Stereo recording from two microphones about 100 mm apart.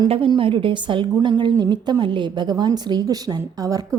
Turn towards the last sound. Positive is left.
turn(degrees=-35)  # may be behind; listen again after turning